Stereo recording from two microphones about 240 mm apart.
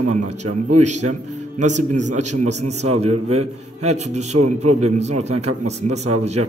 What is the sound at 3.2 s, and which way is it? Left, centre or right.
Speech, right.